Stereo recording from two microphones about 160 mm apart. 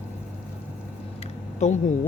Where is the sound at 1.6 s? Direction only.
50° left (ahead or behind).